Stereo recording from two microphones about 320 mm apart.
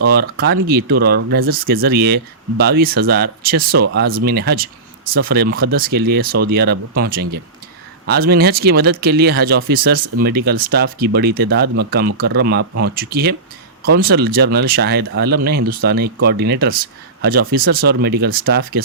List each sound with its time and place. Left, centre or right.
0.0 s speech: right